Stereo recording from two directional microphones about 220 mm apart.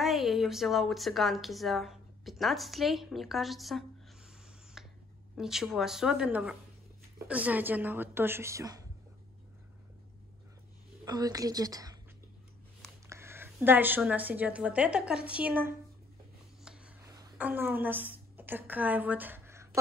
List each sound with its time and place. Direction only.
0.0 s a woman's voice: centre (ahead or behind)
4.8 s a sound: centre (ahead or behind)
5.4 s speech: centre (ahead or behind)
11.1 s speech: 15° right (ahead or behind)
13.1 s speech: 10° right (ahead or behind)
16.6 s a sound: 5° right (ahead or behind)
17.2 s a woman's voice: 10° right (ahead or behind)